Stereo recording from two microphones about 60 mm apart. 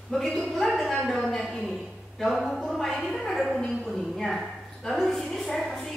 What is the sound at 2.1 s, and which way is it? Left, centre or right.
A woman's voice, centre.